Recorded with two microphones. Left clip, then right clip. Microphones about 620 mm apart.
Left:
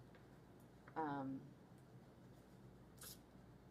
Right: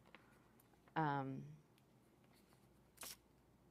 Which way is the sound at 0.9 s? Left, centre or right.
Right.